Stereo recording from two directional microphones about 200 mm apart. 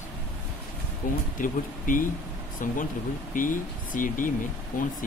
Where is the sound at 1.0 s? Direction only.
40° left (ahead or behind).